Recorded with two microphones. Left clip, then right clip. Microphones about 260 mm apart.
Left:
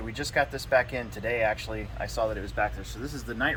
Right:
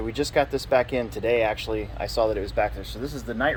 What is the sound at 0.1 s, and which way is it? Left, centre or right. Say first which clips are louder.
Speech: right 4 dB; right.